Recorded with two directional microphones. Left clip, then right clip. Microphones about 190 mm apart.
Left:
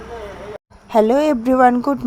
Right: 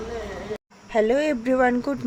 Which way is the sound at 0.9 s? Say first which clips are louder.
Left 6 dB; 25° left (ahead or behind).